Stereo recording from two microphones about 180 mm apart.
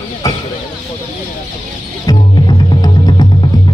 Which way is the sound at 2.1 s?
20° left (ahead or behind).